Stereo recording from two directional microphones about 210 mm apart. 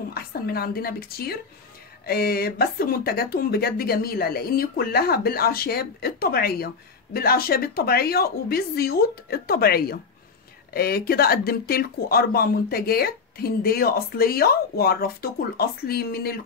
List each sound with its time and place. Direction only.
0.1 s speech: 45° left (ahead or behind)